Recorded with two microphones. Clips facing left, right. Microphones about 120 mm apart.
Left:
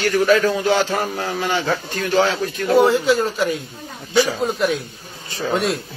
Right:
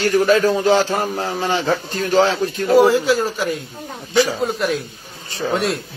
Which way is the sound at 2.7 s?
5° right (ahead or behind).